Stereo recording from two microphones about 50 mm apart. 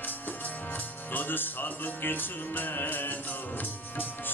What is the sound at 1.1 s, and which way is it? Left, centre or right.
Music, left.